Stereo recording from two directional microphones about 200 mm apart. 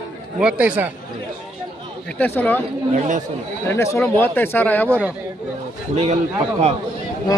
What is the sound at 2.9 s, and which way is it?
Speech, 40° right (ahead or behind).